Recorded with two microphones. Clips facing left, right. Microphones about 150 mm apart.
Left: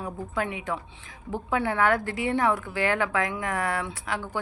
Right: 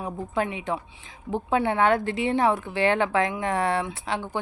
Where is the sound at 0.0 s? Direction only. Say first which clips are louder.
Right 3 dB; 20° right (ahead or behind).